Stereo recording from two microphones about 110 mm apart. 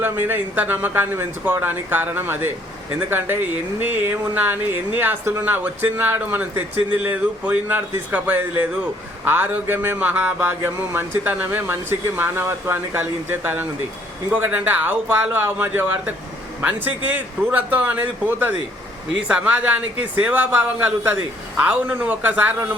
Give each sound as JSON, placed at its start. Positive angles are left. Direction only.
{"t": 0.0, "sound": "speech", "side_deg": -20}